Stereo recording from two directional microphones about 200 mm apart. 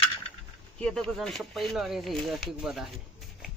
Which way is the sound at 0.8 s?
5° left (ahead or behind).